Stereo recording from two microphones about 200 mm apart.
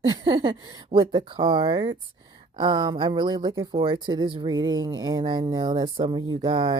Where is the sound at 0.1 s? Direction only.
20° right (ahead or behind).